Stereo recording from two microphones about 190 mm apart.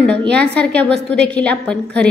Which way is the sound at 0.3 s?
5° left (ahead or behind).